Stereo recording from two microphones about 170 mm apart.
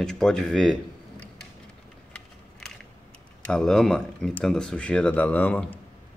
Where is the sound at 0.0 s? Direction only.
5° left (ahead or behind).